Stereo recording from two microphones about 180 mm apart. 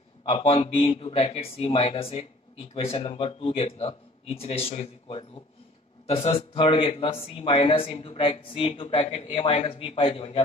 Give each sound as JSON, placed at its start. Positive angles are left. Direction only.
{"t": 0.2, "sound": "speech", "side_deg": 35}